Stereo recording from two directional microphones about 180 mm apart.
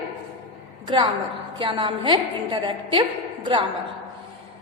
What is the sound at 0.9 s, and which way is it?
A woman's voice, 30° right (ahead or behind).